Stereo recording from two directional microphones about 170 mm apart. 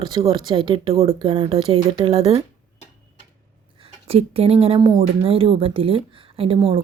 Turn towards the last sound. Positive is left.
turn(degrees=-30)  # may be behind; listen again after turning